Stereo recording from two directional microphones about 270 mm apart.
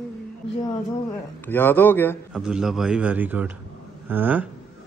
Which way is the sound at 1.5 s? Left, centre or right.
Centre.